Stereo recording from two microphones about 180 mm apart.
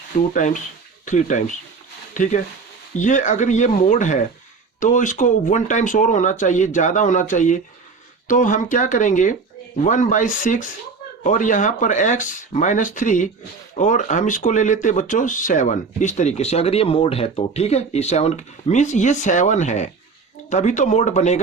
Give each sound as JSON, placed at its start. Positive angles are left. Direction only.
{"t": 0.2, "sound": "speech", "side_deg": 45}